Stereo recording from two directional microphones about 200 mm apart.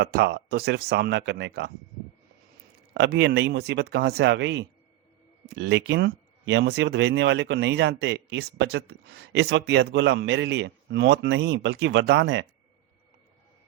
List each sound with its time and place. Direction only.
0.0 s speech: 50° right (ahead or behind)
2.9 s speech: 55° right (ahead or behind)